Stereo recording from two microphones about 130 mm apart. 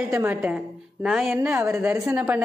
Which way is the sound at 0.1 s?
15° right (ahead or behind).